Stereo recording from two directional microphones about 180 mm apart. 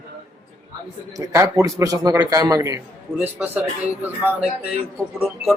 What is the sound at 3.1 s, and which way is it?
A man's voice, 10° right (ahead or behind).